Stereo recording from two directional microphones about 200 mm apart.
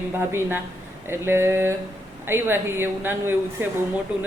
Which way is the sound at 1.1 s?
10° right (ahead or behind).